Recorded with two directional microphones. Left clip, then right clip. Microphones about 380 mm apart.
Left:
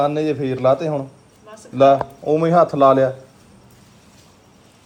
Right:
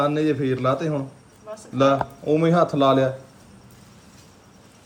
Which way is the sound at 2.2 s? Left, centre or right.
Centre.